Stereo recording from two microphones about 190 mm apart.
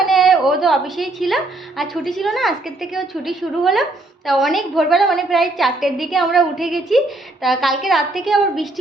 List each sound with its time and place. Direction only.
0.0 s a woman's voice: centre (ahead or behind)